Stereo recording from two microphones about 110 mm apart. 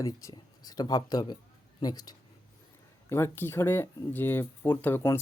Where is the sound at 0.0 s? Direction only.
30° left (ahead or behind).